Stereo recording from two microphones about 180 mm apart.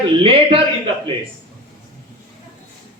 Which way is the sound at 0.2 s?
30° right (ahead or behind).